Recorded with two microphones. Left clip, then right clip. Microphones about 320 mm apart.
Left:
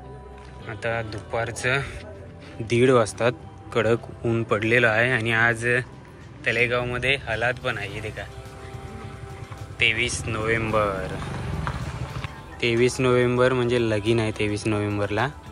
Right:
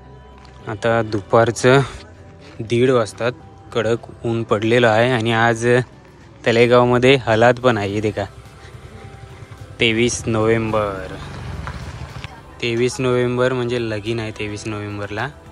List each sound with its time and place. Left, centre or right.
0.7 s speech: centre
9.8 s speech: centre
12.8 s speech: centre